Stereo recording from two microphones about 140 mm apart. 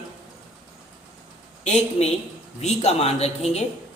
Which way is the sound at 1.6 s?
50° left (ahead or behind).